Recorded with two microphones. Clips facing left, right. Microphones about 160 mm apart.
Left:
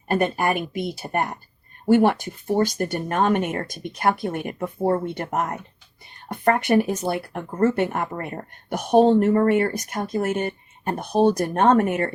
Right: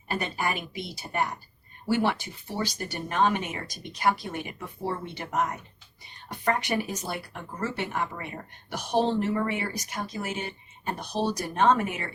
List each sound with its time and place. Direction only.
0.1 s speech: 50° left (ahead or behind)